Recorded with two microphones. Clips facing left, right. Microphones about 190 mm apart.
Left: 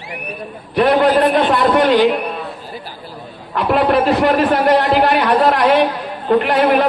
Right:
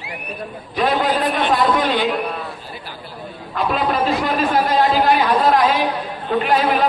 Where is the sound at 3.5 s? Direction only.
65° left (ahead or behind).